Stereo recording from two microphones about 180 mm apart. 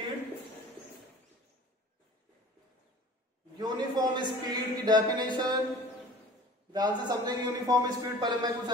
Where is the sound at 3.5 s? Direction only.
25° right (ahead or behind).